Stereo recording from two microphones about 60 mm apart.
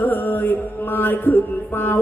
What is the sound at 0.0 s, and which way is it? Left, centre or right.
Music, left.